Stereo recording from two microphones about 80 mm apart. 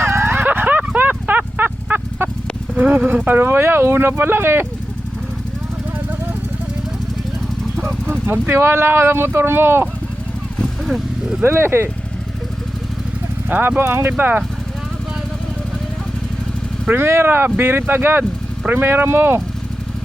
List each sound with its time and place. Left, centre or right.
0.0 s a sound: right
2.7 s speech: centre
8.0 s vehicle: right
8.5 s speech: right
10.6 s vehicle: centre
11.4 s speech: right
13.5 s speech: right
14.1 s speech: right
16.9 s speech: right